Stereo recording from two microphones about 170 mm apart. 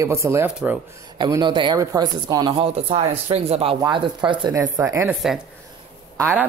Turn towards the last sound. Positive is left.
turn(degrees=-10)  # may be behind; listen again after turning